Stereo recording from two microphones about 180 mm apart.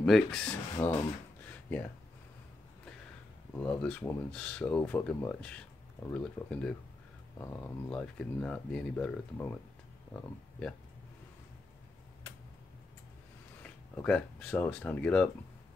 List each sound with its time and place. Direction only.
0.0 s speech: centre (ahead or behind)
0.8 s speech: 10° left (ahead or behind)
1.4 s a sound: 10° left (ahead or behind)
3.5 s speech: 5° left (ahead or behind)
13.6 s speech: 5° left (ahead or behind)